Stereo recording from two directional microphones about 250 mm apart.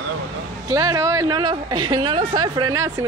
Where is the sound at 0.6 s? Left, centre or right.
Centre.